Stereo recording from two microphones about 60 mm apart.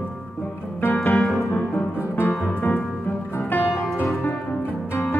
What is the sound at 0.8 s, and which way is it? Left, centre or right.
Music, left.